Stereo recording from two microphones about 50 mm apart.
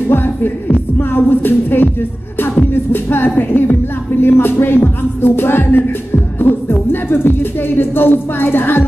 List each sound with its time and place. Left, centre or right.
0.1 s music: left
4.2 s speech: left